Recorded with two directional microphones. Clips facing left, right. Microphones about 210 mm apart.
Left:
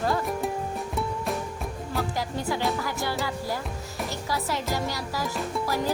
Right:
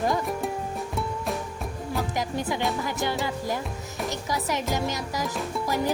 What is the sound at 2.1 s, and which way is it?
Music, 20° right (ahead or behind).